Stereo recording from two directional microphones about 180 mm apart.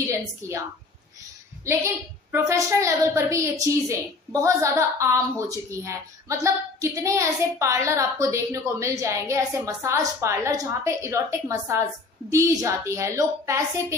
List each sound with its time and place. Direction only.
0.0 s speech: 15° right (ahead or behind)
2.3 s speech: 15° right (ahead or behind)